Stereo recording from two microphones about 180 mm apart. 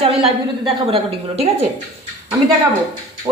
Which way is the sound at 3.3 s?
20° right (ahead or behind).